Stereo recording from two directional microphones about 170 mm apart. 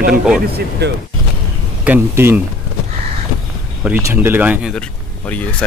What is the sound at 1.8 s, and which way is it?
Speech, 10° right (ahead or behind).